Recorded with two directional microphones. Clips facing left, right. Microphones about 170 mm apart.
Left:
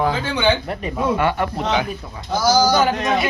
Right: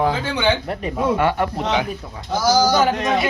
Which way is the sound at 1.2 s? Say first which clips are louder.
Right 1 dB; 35° right (ahead or behind).